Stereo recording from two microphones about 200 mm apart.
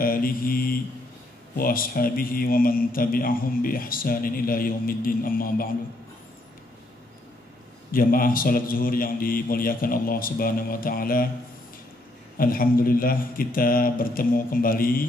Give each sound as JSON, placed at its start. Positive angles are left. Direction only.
{"t": 0.0, "sound": "mantra", "side_deg": 45}
{"t": 1.6, "sound": "a man's voice", "side_deg": 45}
{"t": 7.9, "sound": "a man's voice", "side_deg": 45}
{"t": 12.4, "sound": "a man's voice", "side_deg": 45}